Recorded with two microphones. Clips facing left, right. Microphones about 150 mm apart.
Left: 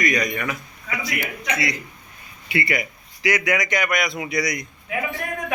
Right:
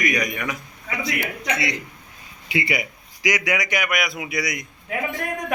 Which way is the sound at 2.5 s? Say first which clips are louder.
Even; 15° right (ahead or behind).